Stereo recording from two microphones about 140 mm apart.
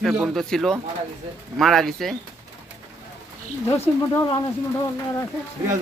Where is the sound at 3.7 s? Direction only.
20° left (ahead or behind).